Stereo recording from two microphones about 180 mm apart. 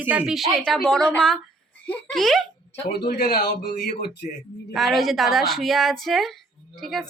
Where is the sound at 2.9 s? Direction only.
55° left (ahead or behind).